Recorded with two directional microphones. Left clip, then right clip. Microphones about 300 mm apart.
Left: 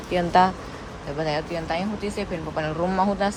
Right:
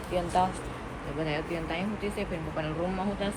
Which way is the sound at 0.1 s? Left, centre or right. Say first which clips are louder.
Left 8 dB; left.